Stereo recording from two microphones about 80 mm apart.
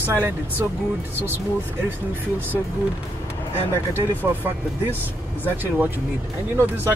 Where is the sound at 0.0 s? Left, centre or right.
Right.